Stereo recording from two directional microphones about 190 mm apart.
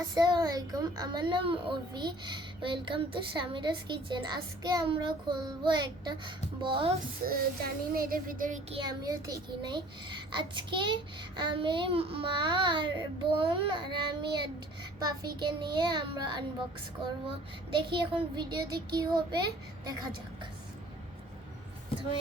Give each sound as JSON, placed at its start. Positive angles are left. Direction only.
{"t": 0.1, "sound": "a child's voice", "side_deg": -20}
{"t": 7.3, "sound": "child singing", "side_deg": -50}
{"t": 8.7, "sound": "a child's voice", "side_deg": -20}
{"t": 17.8, "sound": "a child's voice", "side_deg": -25}